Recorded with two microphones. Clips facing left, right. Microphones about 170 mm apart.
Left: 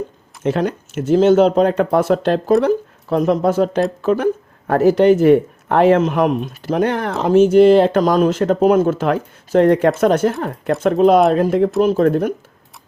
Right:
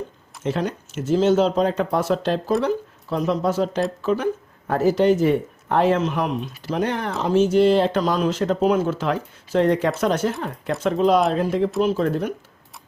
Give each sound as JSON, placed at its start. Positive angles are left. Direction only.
{"t": 0.4, "sound": "speech", "side_deg": 55}